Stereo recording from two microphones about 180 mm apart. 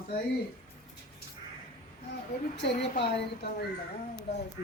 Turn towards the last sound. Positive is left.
turn(degrees=30)  # may be behind; listen again after turning